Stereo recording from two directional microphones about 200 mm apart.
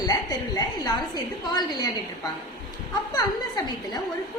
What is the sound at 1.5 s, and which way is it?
Speech, 20° left (ahead or behind).